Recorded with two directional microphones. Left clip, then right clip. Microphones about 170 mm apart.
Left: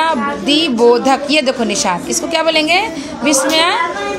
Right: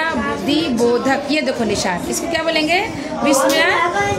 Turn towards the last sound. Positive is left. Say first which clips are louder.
# left 2 dB
turn(degrees=30)  # may be behind; listen again after turning